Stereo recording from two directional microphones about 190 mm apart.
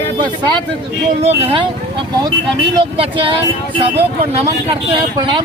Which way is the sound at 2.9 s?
30° right (ahead or behind).